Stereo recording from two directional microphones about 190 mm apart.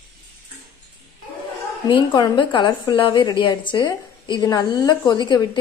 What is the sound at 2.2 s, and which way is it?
A woman's voice, 25° left (ahead or behind).